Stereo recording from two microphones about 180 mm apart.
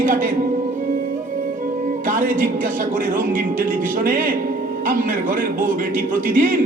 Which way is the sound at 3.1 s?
50° right (ahead or behind).